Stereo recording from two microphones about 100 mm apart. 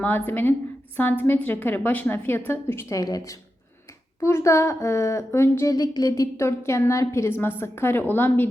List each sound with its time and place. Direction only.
0.0 s a woman's voice: 20° left (ahead or behind)
5.7 s a woman's voice: 40° left (ahead or behind); by 8.4 s 20° left (ahead or behind)